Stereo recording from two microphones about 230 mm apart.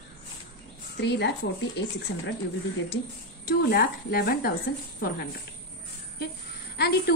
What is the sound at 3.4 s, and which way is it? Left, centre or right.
A woman's voice, left.